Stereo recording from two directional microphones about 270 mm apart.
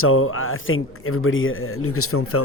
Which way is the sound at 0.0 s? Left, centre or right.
Left.